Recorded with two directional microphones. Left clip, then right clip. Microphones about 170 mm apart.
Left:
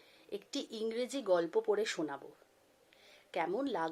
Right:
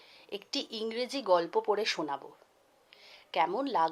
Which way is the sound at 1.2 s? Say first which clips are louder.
Right 5 dB; 50° right (ahead or behind).